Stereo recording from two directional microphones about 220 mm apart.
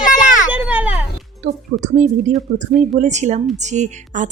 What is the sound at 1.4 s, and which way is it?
A woman's voice, 35° right (ahead or behind).